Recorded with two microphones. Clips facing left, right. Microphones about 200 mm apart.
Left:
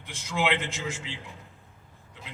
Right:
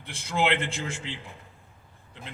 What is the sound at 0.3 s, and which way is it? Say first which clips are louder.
Speech: right 2 dB; 60° right (ahead or behind).